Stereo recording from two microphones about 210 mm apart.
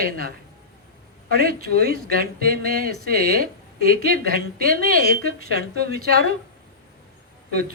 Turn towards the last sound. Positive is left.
turn(degrees=-45)  # may be behind; listen again after turning